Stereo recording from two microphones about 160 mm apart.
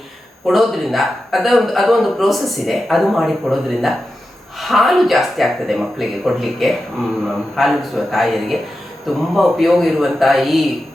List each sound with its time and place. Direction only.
0.4 s a man's voice: centre (ahead or behind)